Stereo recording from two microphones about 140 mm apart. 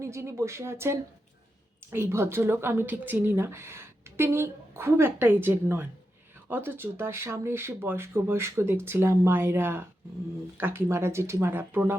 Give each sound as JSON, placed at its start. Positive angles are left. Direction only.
{"t": 0.0, "sound": "speech", "side_deg": -20}